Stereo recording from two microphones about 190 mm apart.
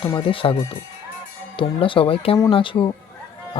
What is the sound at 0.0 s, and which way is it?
Speech, 25° left (ahead or behind).